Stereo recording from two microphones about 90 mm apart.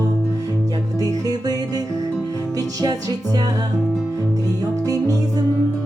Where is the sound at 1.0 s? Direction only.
45° right (ahead or behind).